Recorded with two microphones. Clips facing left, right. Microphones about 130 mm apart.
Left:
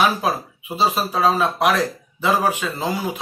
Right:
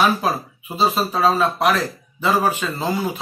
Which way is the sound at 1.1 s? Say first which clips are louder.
Right 1 dB; 5° left (ahead or behind).